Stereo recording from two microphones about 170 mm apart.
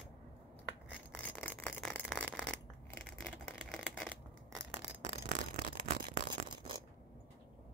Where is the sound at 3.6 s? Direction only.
5° right (ahead or behind).